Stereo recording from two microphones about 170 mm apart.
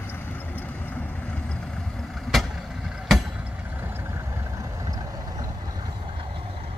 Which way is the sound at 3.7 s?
10° right (ahead or behind).